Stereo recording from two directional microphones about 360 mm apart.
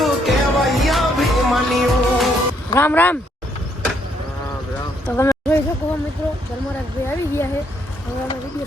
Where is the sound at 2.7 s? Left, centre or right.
Centre.